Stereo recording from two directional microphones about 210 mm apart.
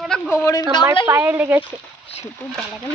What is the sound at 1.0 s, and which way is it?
Speech, 10° right (ahead or behind).